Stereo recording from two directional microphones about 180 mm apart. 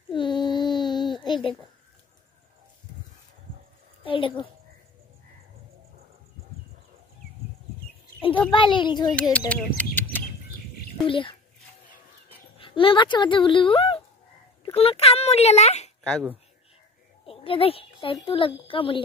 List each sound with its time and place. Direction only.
0.1 s child singing: 25° left (ahead or behind)
1.2 s a sound: 25° left (ahead or behind)
4.0 s a child's voice: 30° left (ahead or behind)
8.2 s a child's voice: 30° left (ahead or behind)
9.1 s speech: 5° left (ahead or behind)
9.5 s bird: 10° left (ahead or behind)
11.1 s a child's voice: 30° left (ahead or behind)
12.5 s speech: 30° left (ahead or behind)
16.0 s speech: 5° left (ahead or behind)
17.3 s a sound: 30° left (ahead or behind)
18.2 s a child's voice: 30° left (ahead or behind)